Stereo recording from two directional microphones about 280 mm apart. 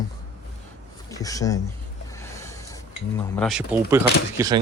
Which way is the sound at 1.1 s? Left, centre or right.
Centre.